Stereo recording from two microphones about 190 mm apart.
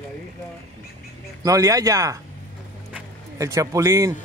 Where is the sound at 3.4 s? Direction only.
15° right (ahead or behind).